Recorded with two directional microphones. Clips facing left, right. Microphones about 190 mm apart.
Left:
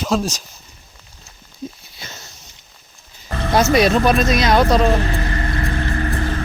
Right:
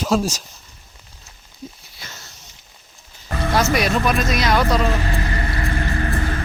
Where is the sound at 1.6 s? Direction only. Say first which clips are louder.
Left 6 dB; 25° left (ahead or behind).